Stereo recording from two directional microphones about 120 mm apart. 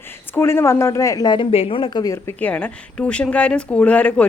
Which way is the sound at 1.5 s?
55° left (ahead or behind).